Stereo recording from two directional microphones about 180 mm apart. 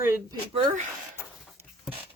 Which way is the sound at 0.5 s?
40° right (ahead or behind).